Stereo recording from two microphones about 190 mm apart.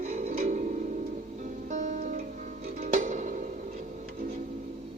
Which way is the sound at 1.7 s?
40° right (ahead or behind).